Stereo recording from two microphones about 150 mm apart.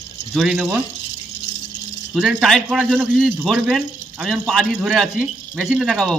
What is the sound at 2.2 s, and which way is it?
Speech, centre (ahead or behind).